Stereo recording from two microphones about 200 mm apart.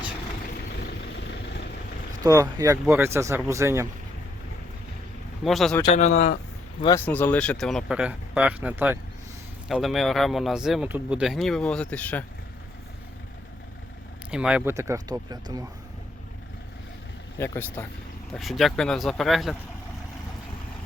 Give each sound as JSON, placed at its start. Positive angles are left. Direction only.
{"t": 0.8, "sound": "vehicle", "side_deg": 55}
{"t": 2.2, "sound": "speech", "side_deg": -15}
{"t": 5.4, "sound": "speech", "side_deg": 0}
{"t": 5.9, "sound": "speech", "side_deg": 35}
{"t": 6.8, "sound": "speech", "side_deg": 10}
{"t": 14.3, "sound": "speech", "side_deg": -5}
{"t": 17.3, "sound": "speech", "side_deg": 15}